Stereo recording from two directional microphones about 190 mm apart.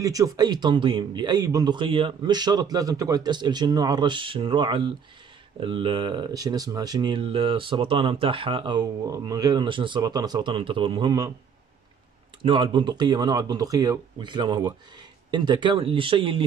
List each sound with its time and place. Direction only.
0.0 s speech: 20° right (ahead or behind)
12.4 s speech: 25° right (ahead or behind)